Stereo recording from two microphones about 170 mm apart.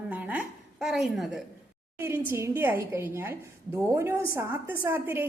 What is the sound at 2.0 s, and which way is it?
A woman's voice, 15° right (ahead or behind).